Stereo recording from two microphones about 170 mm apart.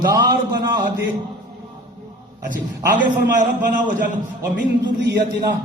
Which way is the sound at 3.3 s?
50° right (ahead or behind).